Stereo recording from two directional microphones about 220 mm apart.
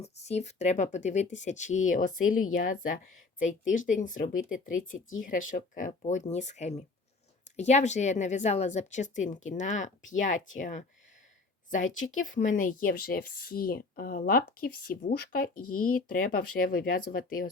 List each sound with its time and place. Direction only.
0.0 s speech: 30° left (ahead or behind)
12.1 s speech: 35° left (ahead or behind)